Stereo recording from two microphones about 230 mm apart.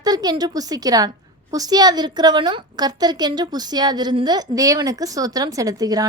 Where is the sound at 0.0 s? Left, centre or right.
Centre.